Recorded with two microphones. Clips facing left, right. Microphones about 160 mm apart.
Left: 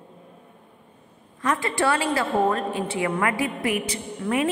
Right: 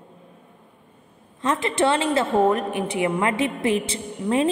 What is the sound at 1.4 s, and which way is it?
A woman's voice, 20° right (ahead or behind).